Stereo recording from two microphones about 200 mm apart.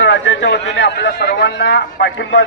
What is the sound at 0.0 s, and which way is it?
A man's voice, 65° left (ahead or behind).